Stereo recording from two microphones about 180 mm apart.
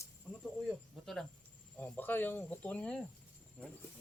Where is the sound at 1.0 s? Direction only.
Centre (ahead or behind).